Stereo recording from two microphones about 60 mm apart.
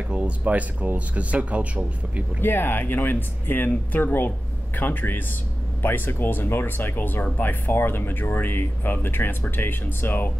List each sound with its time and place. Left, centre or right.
0.1 s speech: centre
2.4 s speech: left